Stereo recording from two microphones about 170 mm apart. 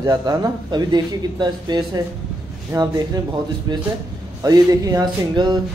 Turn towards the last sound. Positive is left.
turn(degrees=-25)  # may be behind; listen again after turning